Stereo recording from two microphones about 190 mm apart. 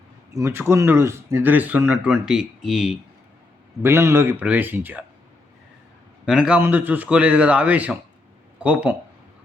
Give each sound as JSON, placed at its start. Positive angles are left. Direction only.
{"t": 0.3, "sound": "speech", "side_deg": -15}
{"t": 3.8, "sound": "speech", "side_deg": -15}
{"t": 6.2, "sound": "speech", "side_deg": -5}